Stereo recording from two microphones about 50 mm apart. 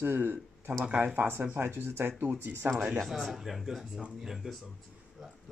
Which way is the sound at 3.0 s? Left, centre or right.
Centre.